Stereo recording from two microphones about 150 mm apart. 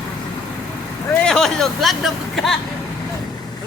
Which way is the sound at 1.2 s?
5° left (ahead or behind).